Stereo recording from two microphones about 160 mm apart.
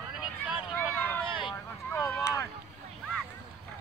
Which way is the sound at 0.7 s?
10° left (ahead or behind).